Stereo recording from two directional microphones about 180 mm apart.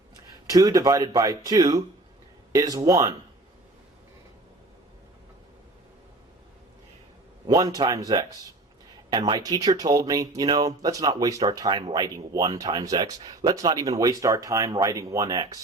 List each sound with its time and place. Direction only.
0.4 s speech: 20° right (ahead or behind)
7.4 s speech: 20° right (ahead or behind)
9.4 s speech: 20° right (ahead or behind)